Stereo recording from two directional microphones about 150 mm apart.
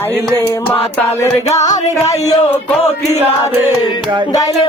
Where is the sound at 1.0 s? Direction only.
15° left (ahead or behind).